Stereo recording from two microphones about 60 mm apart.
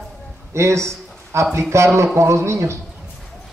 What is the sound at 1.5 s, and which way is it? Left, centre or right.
Speech, right.